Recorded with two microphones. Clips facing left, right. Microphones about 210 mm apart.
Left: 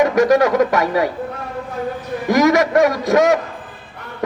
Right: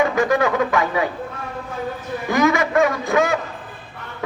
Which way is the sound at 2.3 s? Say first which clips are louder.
Left 4 dB; 75° left (ahead or behind).